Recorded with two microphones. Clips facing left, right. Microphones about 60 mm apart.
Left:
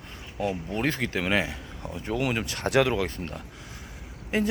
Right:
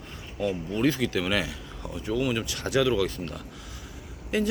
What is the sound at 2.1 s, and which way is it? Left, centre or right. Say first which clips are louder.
Speech: even; left.